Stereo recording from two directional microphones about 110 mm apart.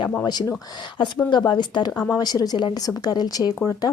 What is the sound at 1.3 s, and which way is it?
A woman's voice, 40° left (ahead or behind).